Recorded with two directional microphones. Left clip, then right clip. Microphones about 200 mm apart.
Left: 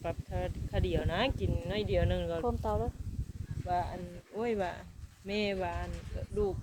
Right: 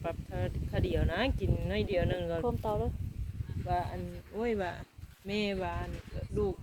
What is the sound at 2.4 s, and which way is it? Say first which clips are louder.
Speech: even; 10° right (ahead or behind).